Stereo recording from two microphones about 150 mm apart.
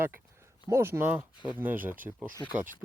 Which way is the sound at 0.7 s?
15° right (ahead or behind).